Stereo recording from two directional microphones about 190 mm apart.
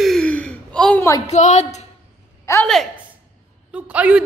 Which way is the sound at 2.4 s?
15° left (ahead or behind).